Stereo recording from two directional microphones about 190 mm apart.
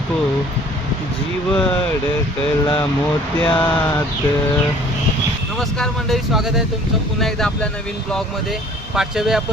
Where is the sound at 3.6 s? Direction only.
10° left (ahead or behind).